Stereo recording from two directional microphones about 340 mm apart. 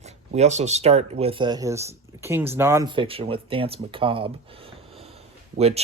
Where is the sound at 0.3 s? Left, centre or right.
Centre.